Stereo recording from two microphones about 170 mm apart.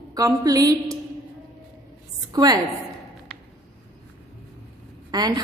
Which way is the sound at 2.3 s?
20° right (ahead or behind).